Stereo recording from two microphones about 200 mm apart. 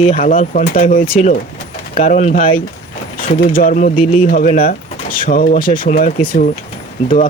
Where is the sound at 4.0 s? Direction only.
30° left (ahead or behind).